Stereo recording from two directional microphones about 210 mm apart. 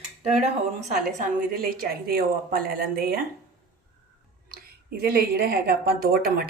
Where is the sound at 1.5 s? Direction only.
45° right (ahead or behind).